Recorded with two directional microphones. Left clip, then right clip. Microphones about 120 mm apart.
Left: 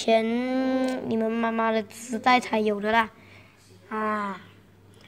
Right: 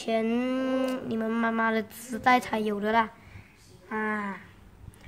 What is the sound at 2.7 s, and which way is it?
Speech, 15° left (ahead or behind).